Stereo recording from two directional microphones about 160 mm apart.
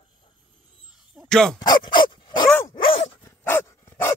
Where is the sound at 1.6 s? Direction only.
30° left (ahead or behind).